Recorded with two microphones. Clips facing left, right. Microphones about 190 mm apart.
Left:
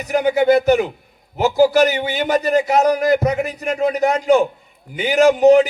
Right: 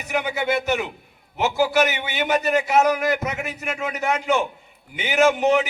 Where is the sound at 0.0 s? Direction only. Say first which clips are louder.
Left 9 dB; 40° left (ahead or behind).